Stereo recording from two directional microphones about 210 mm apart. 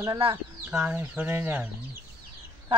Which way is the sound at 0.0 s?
20° right (ahead or behind).